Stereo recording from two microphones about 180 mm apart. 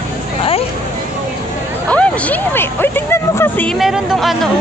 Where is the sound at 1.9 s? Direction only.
5° left (ahead or behind).